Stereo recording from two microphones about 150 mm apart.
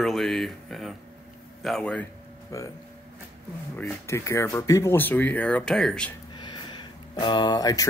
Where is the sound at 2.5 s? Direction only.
20° left (ahead or behind).